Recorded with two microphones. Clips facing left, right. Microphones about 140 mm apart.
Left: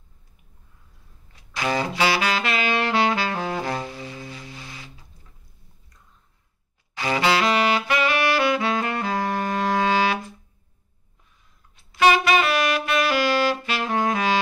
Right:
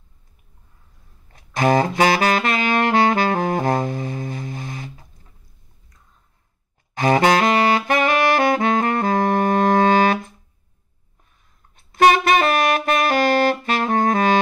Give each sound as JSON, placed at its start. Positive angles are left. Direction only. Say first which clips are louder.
{"t": 1.3, "sound": "saxophone", "louder": "right 8 dB", "side_deg": -50}
{"t": 7.0, "sound": "saxophone", "louder": "right 6 dB", "side_deg": -45}
{"t": 11.7, "sound": "saxophone", "louder": "right 3 dB", "side_deg": -50}